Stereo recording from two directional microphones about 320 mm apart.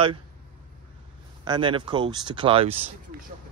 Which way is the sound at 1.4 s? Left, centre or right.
Centre.